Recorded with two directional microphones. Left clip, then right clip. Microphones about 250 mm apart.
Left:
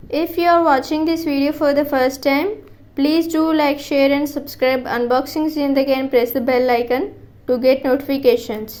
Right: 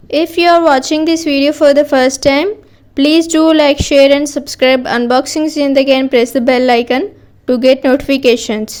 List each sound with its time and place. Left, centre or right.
0.1 s a woman's voice: right